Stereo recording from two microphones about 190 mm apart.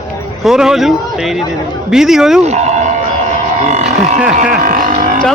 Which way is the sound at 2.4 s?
35° right (ahead or behind).